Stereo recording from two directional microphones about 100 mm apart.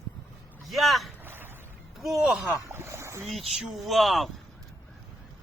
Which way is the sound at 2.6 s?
25° right (ahead or behind).